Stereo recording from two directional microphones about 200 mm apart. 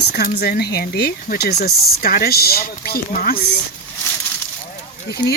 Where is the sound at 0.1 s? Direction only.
50° left (ahead or behind).